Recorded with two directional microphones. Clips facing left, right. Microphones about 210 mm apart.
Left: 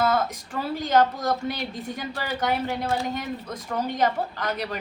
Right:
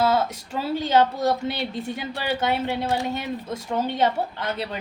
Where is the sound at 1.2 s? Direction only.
25° right (ahead or behind).